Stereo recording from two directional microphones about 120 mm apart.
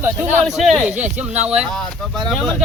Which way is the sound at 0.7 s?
10° right (ahead or behind).